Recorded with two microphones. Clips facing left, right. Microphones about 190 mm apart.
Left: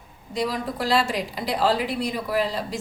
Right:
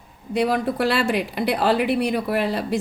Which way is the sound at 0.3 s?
60° right (ahead or behind).